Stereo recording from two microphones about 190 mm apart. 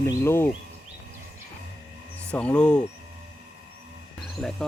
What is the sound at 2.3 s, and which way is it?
Speech, 5° left (ahead or behind).